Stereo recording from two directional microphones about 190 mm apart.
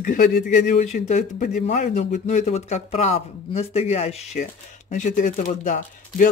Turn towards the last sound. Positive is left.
turn(degrees=40)  # may be behind; listen again after turning